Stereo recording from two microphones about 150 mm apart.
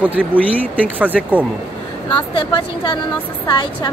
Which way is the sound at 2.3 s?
30° left (ahead or behind).